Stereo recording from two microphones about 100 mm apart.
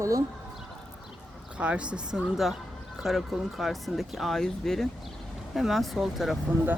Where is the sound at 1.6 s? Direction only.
10° right (ahead or behind).